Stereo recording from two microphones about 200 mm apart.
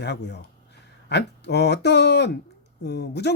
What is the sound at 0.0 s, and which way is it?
Speech, 55° left (ahead or behind).